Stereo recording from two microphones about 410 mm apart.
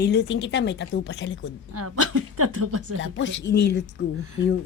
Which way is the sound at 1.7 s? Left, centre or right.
Right.